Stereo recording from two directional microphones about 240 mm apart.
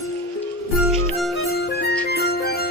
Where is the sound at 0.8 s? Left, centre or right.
Centre.